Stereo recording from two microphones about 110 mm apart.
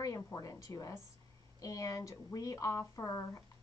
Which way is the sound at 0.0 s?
30° left (ahead or behind).